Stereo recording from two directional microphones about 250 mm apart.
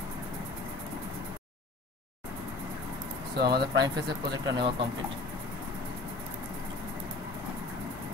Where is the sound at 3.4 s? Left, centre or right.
Right.